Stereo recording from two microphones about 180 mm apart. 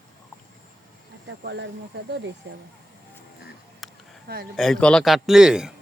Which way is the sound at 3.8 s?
Centre (ahead or behind).